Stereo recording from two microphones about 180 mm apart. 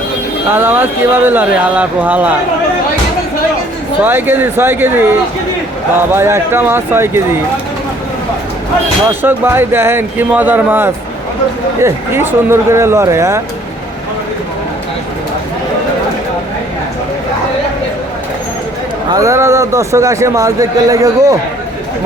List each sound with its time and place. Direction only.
0.5 s a man's voice: 10° right (ahead or behind)
4.0 s a man's voice: 10° right (ahead or behind)
6.1 s a man's voice: 15° right (ahead or behind)
9.2 s a man's voice: 10° right (ahead or behind)
19.1 s a man's voice: 15° right (ahead or behind)